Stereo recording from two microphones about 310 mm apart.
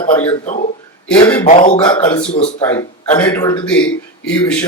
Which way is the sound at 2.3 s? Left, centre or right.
Left.